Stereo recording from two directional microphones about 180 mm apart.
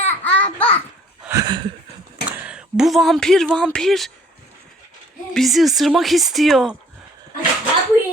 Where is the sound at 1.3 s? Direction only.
20° right (ahead or behind).